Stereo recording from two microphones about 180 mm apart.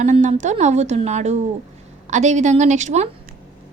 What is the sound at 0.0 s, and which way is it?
A woman's voice, 40° right (ahead or behind).